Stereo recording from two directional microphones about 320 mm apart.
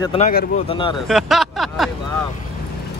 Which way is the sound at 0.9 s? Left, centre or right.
Centre.